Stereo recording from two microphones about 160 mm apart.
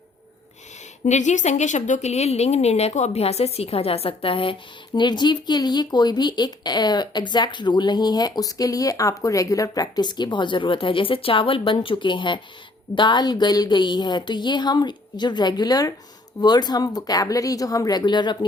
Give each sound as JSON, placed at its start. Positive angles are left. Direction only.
{"t": 1.0, "sound": "a woman's voice", "side_deg": 50}